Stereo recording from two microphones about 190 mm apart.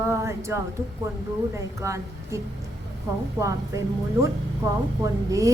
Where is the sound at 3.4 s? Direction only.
15° right (ahead or behind).